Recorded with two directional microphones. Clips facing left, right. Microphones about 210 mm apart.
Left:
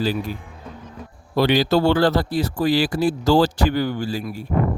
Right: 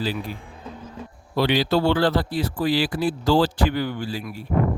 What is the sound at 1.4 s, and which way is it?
A man's voice, 45° left (ahead or behind).